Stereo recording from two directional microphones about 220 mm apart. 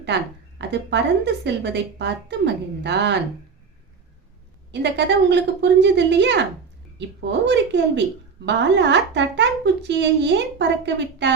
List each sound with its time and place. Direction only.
0.6 s speech: 50° right (ahead or behind)
4.7 s speech: 50° right (ahead or behind)